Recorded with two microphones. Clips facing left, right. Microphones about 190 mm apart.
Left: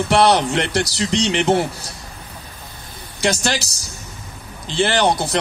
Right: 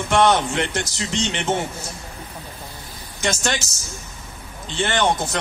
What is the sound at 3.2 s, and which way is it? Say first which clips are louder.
A man's voice: left 3 dB; 35° left (ahead or behind).